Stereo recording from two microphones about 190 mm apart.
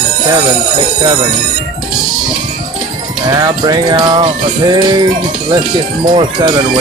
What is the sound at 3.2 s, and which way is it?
Music, 20° right (ahead or behind).